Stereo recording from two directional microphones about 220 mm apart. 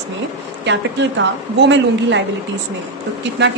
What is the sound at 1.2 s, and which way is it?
Speech, 55° right (ahead or behind).